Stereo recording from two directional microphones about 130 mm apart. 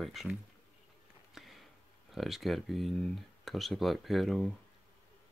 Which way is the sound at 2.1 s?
Centre (ahead or behind).